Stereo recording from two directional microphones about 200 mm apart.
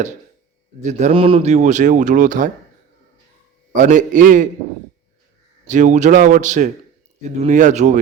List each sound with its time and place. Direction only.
0.8 s speech: 35° right (ahead or behind)
3.7 s speech: 40° right (ahead or behind)
5.6 s speech: 35° right (ahead or behind)